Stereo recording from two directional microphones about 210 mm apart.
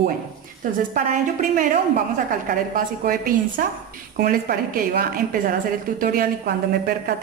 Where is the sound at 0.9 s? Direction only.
40° right (ahead or behind).